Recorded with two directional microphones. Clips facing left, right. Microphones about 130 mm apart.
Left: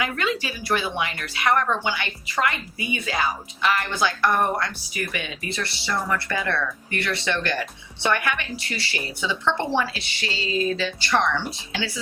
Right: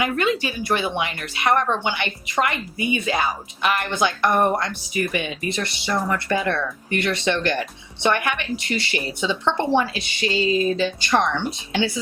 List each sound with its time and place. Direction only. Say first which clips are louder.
0.0 s speech: right 4 dB; 20° right (ahead or behind)